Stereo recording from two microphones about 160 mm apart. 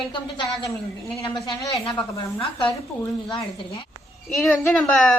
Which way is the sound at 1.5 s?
25° left (ahead or behind).